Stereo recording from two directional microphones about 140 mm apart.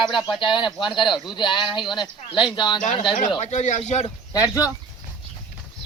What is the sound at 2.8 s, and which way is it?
Speech, 60° left (ahead or behind).